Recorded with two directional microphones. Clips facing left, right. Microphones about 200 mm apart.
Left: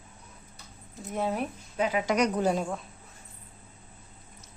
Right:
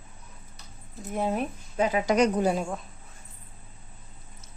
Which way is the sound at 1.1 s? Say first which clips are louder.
Right 2 dB; 15° right (ahead or behind).